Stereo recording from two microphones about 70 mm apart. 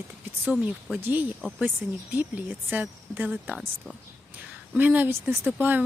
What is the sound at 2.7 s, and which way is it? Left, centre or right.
Speech, right.